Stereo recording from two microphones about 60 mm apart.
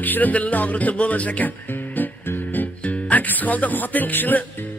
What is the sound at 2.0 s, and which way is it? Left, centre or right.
Speech, left.